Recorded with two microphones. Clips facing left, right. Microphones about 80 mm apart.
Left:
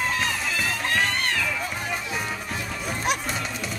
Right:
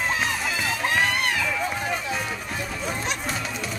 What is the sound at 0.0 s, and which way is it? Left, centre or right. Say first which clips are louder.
Music: right 1 dB; centre.